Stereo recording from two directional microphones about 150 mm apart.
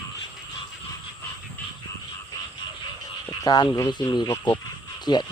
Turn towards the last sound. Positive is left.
turn(degrees=30)  # may be behind; listen again after turning